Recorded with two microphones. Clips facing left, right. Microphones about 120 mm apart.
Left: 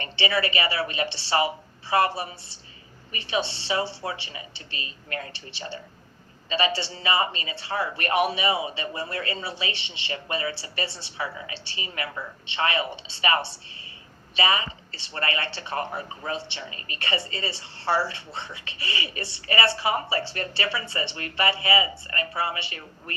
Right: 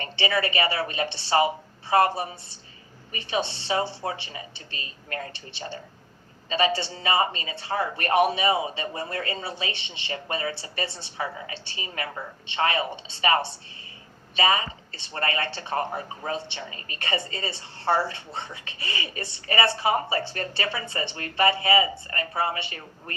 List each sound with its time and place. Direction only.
0.0 s speech: 45° right (ahead or behind)